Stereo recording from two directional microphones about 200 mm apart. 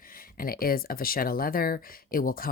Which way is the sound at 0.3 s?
45° left (ahead or behind).